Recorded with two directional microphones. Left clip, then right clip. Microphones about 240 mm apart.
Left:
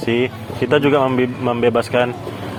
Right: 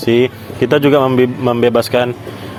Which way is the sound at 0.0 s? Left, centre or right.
Right.